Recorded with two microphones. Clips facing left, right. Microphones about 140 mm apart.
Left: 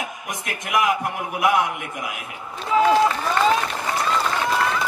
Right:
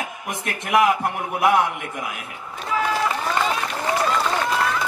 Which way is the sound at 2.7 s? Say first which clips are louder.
Left 6 dB; 25° left (ahead or behind).